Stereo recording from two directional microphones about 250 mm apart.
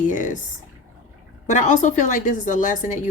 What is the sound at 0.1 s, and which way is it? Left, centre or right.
Speech, left.